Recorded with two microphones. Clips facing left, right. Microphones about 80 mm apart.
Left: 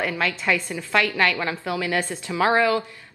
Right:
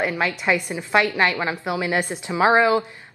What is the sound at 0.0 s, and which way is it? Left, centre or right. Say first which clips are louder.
Speech: right 2 dB; right.